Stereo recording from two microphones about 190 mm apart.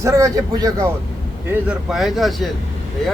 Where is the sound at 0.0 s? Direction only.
15° right (ahead or behind).